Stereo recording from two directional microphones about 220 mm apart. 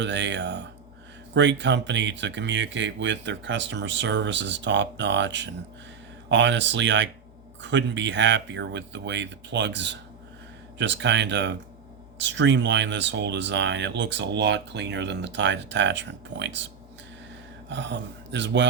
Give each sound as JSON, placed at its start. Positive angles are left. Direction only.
{"t": 0.0, "sound": "speech", "side_deg": -55}
{"t": 17.7, "sound": "speech", "side_deg": -55}